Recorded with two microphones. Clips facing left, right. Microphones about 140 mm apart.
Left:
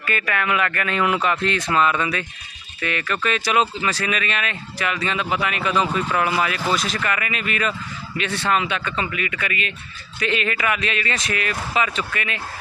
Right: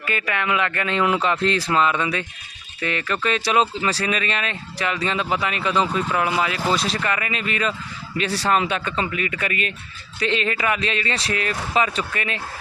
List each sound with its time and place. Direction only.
0.0 s speech: 20° right (ahead or behind)